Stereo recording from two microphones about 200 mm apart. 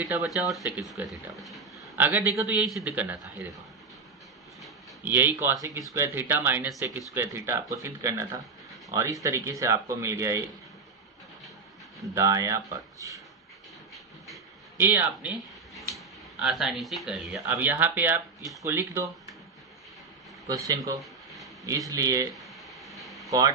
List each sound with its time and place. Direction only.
0.0 s speech: 10° right (ahead or behind)
4.6 s a sound: 10° right (ahead or behind)
5.9 s speech: 10° right (ahead or behind)
12.1 s speech: 15° right (ahead or behind)
14.8 s speech: 10° right (ahead or behind)
16.4 s speech: 5° right (ahead or behind)
20.5 s speech: 15° right (ahead or behind)
22.4 s a sound: centre (ahead or behind)
23.3 s speech: 20° right (ahead or behind)